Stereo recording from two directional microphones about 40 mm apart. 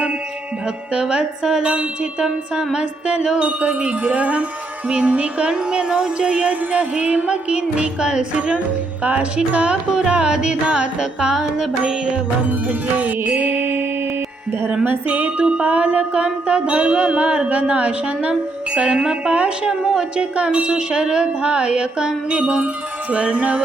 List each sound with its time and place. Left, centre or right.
1.0 s music: centre
5.5 s music: centre
13.0 s music: right
15.1 s music: right
15.4 s music: right
23.1 s music: right